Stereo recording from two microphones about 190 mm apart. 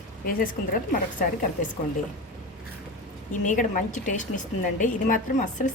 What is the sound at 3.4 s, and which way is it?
A woman's voice, 45° left (ahead or behind).